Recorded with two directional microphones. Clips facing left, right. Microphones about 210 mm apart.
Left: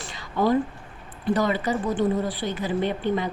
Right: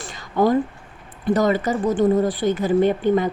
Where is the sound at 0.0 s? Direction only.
45° right (ahead or behind).